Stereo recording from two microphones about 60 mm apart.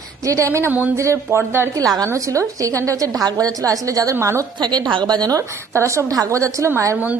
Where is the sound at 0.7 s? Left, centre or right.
Right.